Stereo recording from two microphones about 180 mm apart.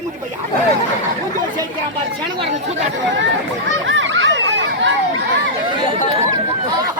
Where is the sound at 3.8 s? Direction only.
90° right.